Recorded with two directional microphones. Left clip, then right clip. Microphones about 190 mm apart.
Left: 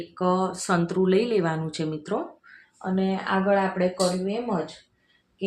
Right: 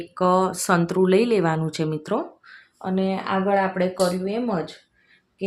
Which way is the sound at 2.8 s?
55° right (ahead or behind).